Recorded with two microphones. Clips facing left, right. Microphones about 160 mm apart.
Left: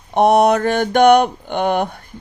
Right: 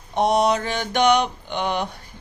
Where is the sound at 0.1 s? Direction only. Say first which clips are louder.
Left 6 dB; 55° left (ahead or behind).